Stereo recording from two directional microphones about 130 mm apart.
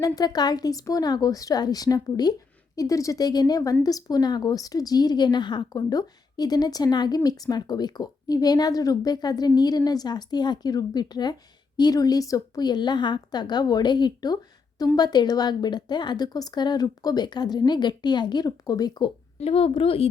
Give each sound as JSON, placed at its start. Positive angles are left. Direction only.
{"t": 0.0, "sound": "a woman's voice", "side_deg": 30}
{"t": 19.4, "sound": "speech", "side_deg": 50}